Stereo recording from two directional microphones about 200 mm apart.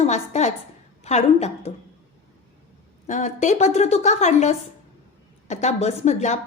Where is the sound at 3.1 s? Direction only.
35° left (ahead or behind).